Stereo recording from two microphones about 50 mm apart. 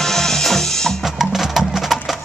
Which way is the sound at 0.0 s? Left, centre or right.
Centre.